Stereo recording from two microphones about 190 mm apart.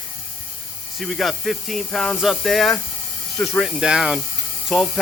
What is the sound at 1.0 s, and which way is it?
Speech, centre (ahead or behind).